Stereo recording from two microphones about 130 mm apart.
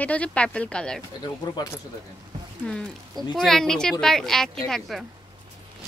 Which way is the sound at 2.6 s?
Centre (ahead or behind).